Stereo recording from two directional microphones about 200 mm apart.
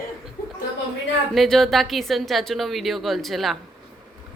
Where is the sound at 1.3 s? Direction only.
Centre (ahead or behind).